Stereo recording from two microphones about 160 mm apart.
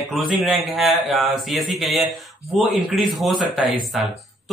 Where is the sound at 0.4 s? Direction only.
Centre (ahead or behind).